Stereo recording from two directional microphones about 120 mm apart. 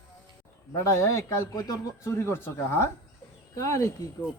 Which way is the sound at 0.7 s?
25° left (ahead or behind).